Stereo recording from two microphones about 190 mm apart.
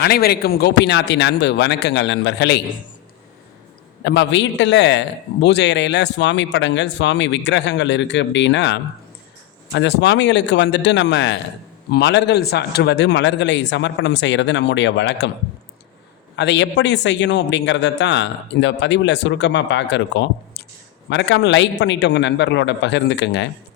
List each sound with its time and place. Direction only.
0.0 s a man's voice: 55° left (ahead or behind)
4.0 s a man's voice: 65° left (ahead or behind)
16.3 s a man's voice: 65° left (ahead or behind)